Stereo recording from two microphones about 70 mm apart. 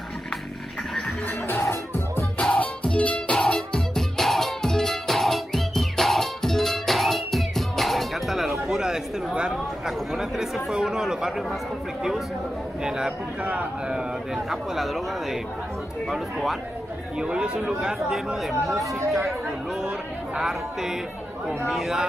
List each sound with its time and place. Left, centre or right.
1.6 s music: left
2.6 s music: centre
8.6 s chatter: centre
9.5 s speech: centre
12.8 s speech: centre
16.1 s speech: centre
17.7 s speech: centre
18.8 s speech: right
19.0 s speech: centre
20.3 s speech: centre